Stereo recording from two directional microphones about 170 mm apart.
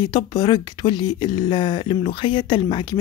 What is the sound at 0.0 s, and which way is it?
Speech, 25° left (ahead or behind).